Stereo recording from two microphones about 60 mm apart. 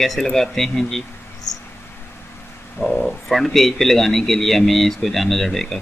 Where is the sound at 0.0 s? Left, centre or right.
Centre.